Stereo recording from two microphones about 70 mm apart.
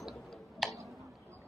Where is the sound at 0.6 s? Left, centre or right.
Centre.